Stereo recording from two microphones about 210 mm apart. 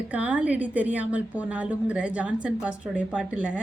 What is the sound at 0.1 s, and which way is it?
Speech, 5° right (ahead or behind).